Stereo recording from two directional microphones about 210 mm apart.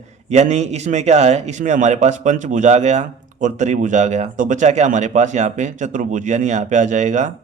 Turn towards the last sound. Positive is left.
turn(degrees=-35)  # may be behind; listen again after turning